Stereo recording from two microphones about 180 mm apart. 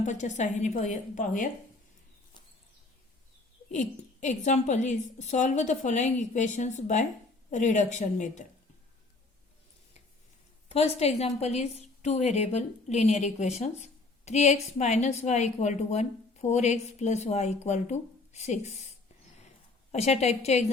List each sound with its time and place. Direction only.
0.0 s a woman's voice: 40° left (ahead or behind)
3.7 s a woman's voice: 45° left (ahead or behind)
10.7 s a woman's voice: 35° left (ahead or behind)
19.9 s a woman's voice: 35° left (ahead or behind)